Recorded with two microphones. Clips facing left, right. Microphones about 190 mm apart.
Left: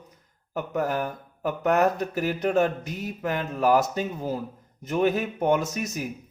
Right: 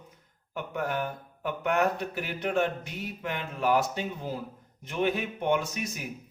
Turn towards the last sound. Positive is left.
turn(degrees=40)  # may be behind; listen again after turning